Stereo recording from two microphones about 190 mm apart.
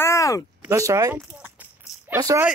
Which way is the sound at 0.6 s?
15° right (ahead or behind).